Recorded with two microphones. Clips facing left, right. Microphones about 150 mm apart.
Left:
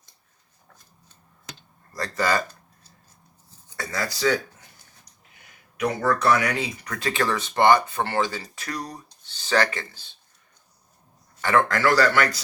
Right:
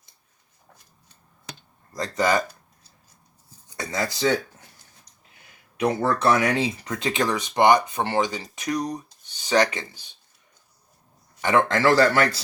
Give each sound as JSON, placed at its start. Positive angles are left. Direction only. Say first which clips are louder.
{"t": 1.9, "sound": "a sound", "louder": "right 2 dB", "side_deg": -20}
{"t": 3.8, "sound": "speech", "louder": "right 2 dB", "side_deg": -20}
{"t": 5.7, "sound": "speech", "louder": "right 1 dB", "side_deg": -30}
{"t": 11.3, "sound": "speech", "louder": "right 1 dB", "side_deg": -20}